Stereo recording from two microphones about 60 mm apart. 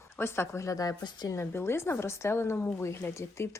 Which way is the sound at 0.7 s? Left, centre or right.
Left.